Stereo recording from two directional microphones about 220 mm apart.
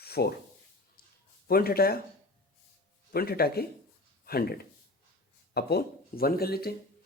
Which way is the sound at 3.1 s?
45° left (ahead or behind).